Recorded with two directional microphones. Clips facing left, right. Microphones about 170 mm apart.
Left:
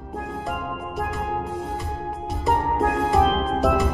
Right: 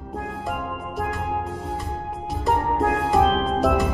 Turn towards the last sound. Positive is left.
turn(degrees=0)  # may be behind; listen again after turning